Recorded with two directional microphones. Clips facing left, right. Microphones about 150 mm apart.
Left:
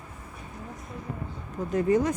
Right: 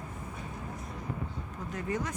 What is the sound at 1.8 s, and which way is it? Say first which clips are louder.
Speech: left 11 dB; 25° left (ahead or behind).